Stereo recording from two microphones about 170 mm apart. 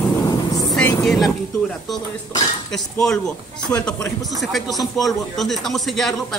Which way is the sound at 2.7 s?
5° left (ahead or behind).